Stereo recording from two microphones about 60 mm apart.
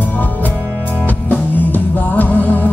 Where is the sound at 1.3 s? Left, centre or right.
Left.